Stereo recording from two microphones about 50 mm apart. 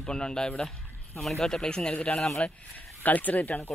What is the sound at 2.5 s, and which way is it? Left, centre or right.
Speech, left.